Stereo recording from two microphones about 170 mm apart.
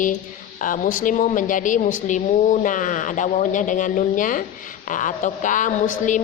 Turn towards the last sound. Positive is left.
turn(degrees=50)  # may be behind; listen again after turning